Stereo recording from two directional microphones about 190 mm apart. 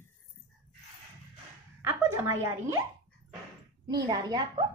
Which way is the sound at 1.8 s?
10° right (ahead or behind).